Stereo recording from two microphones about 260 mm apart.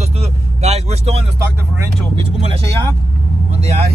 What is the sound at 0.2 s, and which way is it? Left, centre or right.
Vehicle, right.